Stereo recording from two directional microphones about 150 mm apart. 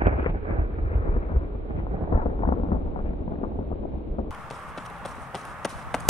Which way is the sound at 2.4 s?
40° left (ahead or behind).